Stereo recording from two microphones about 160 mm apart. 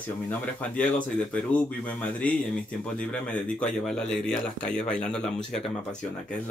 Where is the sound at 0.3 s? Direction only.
10° left (ahead or behind).